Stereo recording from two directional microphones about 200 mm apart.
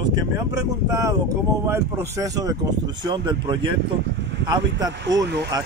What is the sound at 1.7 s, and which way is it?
Speech, 15° right (ahead or behind).